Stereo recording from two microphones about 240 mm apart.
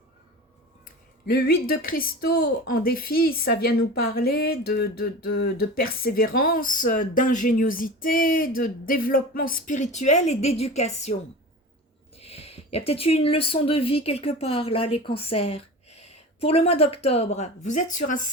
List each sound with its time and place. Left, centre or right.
0.9 s a sound: left
1.6 s a woman's voice: left
12.1 s speech: left